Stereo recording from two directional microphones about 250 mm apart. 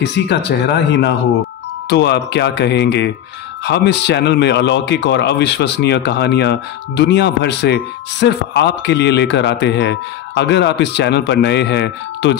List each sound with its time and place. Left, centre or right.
0.0 s speech: left